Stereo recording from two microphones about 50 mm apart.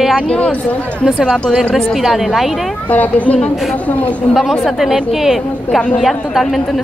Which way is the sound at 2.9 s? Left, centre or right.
Left.